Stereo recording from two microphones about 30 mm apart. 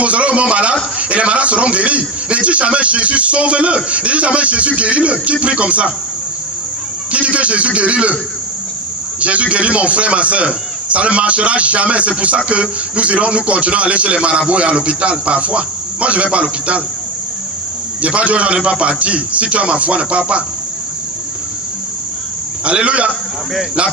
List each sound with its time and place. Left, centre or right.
0.0 s a man's voice: right
7.1 s a man's voice: right
9.2 s a man's voice: right
18.0 s a man's voice: right
22.7 s a man's voice: right